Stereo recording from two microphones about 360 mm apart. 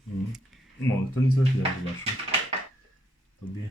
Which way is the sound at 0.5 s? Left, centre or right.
Centre.